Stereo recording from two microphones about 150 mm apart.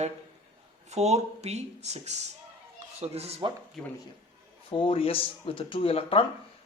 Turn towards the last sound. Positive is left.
turn(degrees=40)  # may be behind; listen again after turning